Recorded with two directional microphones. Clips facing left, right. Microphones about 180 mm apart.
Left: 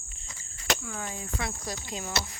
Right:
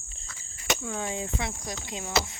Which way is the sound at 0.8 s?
20° right (ahead or behind).